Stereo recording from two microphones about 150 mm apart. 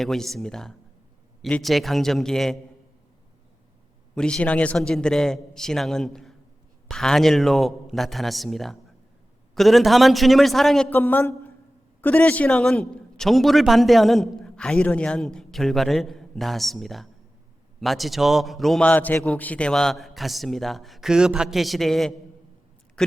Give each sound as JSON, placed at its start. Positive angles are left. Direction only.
{"t": 0.0, "sound": "a man's voice", "side_deg": 0}
{"t": 4.1, "sound": "a man's voice", "side_deg": 5}